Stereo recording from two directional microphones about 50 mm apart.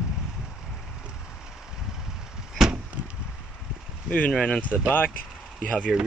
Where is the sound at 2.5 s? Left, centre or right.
Centre.